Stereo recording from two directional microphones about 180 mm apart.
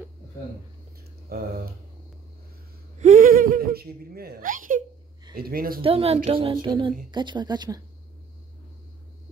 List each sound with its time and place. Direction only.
1.3 s speech: 55° right (ahead or behind)
3.0 s speech: 45° right (ahead or behind)
5.8 s a woman's voice: 30° right (ahead or behind)